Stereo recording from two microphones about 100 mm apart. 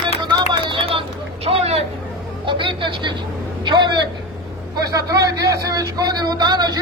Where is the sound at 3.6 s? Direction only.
50° right (ahead or behind).